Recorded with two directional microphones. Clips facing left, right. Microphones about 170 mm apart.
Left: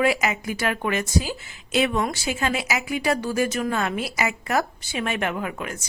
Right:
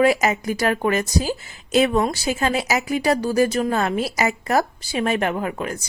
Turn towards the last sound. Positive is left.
turn(degrees=-35)  # may be behind; listen again after turning